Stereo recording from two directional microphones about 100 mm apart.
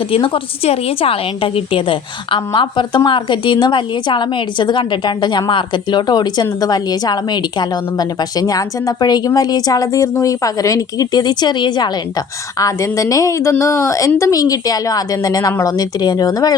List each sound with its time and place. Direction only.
0.1 s a woman's voice: 65° left (ahead or behind)
2.5 s a woman's voice: 50° left (ahead or behind)
12.5 s a woman's voice: 35° left (ahead or behind)